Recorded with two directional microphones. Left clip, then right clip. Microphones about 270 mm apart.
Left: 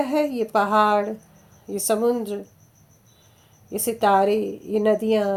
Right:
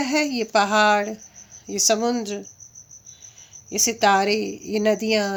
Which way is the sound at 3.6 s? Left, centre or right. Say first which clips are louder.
Right 2 dB; centre.